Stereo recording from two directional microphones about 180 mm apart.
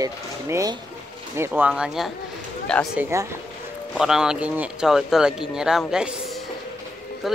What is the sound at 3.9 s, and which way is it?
Speech, centre (ahead or behind).